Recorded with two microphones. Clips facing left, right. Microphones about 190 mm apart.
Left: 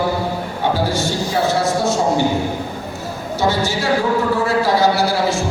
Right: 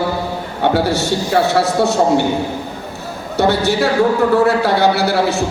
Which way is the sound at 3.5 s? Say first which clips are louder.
Right 3 dB; 65° right (ahead or behind).